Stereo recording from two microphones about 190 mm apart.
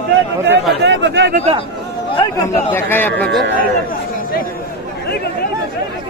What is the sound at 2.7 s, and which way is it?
Speech, 10° left (ahead or behind).